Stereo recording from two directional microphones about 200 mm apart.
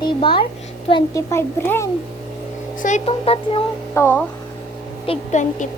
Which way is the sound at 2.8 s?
35° left (ahead or behind).